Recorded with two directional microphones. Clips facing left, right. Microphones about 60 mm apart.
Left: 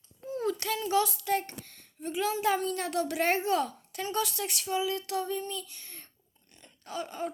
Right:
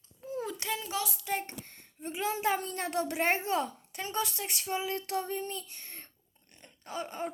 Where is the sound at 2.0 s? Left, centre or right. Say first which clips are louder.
Left 2 dB; right.